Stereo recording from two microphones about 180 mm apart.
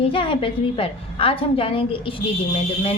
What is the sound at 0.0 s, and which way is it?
A woman's voice, 30° left (ahead or behind).